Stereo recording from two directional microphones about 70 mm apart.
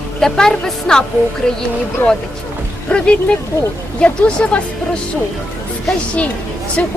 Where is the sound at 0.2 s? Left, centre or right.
Centre.